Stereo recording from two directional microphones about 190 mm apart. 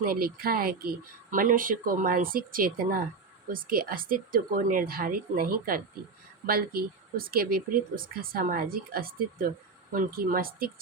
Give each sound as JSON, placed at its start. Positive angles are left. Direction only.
{"t": 0.0, "sound": "speech", "side_deg": -50}